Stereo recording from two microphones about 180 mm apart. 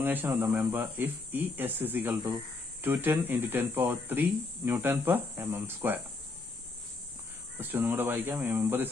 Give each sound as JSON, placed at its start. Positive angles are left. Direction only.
{"t": 0.0, "sound": "speech", "side_deg": -10}
{"t": 7.5, "sound": "speech", "side_deg": -10}